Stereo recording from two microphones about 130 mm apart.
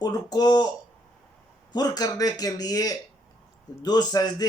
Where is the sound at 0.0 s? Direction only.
30° left (ahead or behind).